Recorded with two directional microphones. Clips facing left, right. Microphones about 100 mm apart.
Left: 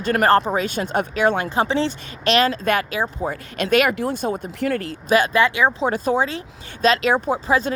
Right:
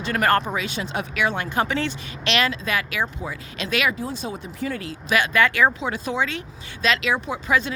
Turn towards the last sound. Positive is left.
turn(degrees=35)  # may be behind; listen again after turning